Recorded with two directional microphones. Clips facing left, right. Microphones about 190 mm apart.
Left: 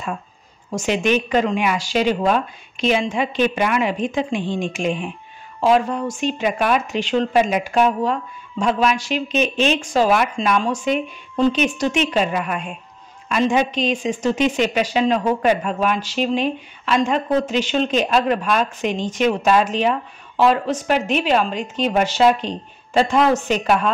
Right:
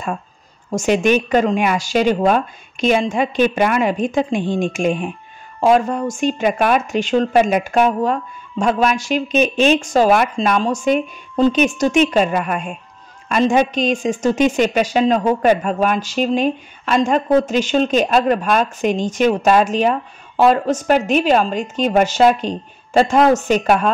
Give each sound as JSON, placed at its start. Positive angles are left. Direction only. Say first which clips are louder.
{"t": 0.7, "sound": "a woman's voice", "louder": "right 4 dB", "side_deg": -45}